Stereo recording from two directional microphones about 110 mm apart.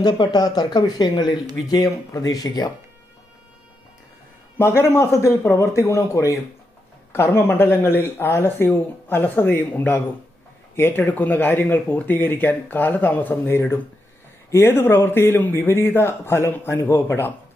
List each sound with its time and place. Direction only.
0.0 s speech: 40° left (ahead or behind)
4.6 s speech: 20° left (ahead or behind)